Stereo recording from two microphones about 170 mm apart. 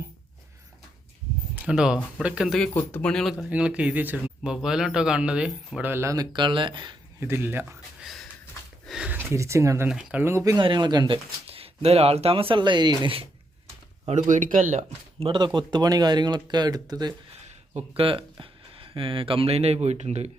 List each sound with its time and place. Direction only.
1.5 s speech: 5° right (ahead or behind); by 6.9 s 30° right (ahead or behind)
7.2 s speech: 15° right (ahead or behind)
8.0 s sniff: centre (ahead or behind)
8.9 s speech: 5° right (ahead or behind)
9.9 s speech: 5° right (ahead or behind); by 11.2 s 25° right (ahead or behind)
11.4 s speech: 35° right (ahead or behind)
14.1 s speech: 45° right (ahead or behind)
15.2 s speech: 30° right (ahead or behind)
17.4 s speech: 40° right (ahead or behind)